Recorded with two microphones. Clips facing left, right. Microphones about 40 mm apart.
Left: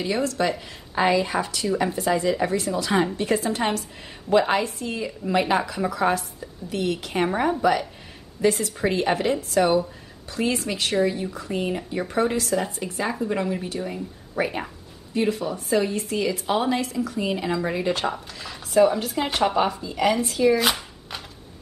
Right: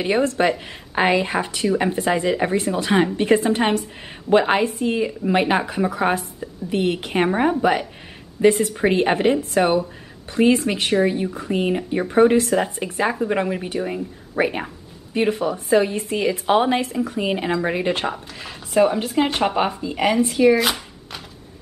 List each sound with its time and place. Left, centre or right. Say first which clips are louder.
0.0 s a woman's voice: right 5 dB; right; by 19.5 s centre
19.5 s a woman's voice: right 1 dB; right
20.5 s a sound: right 2 dB; centre